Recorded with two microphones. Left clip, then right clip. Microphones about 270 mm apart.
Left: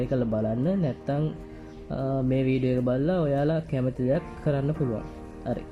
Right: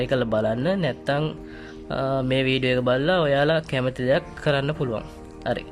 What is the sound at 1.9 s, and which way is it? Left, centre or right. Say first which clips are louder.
Speech: right 5 dB; right.